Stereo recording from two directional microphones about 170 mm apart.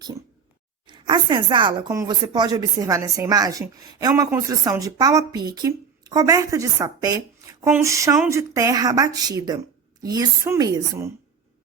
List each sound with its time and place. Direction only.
0.9 s speech: 25° right (ahead or behind)